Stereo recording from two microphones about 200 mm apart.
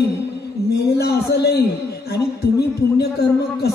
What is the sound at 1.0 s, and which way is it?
Speech, 55° left (ahead or behind).